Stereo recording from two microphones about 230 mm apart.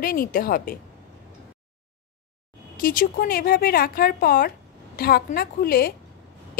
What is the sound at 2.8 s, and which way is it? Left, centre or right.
A woman's voice, left.